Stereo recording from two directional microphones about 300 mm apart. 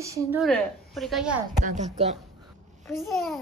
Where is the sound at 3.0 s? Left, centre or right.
Centre.